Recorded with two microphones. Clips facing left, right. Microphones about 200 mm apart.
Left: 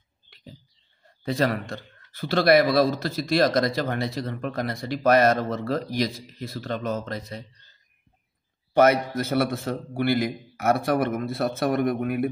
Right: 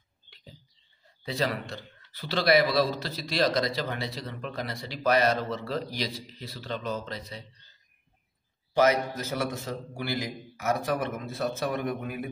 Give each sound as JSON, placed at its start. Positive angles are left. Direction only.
{"t": 1.0, "sound": "speech", "side_deg": 55}
{"t": 8.7, "sound": "a man's voice", "side_deg": 60}